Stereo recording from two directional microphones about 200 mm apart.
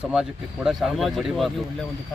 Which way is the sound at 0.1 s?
5° right (ahead or behind).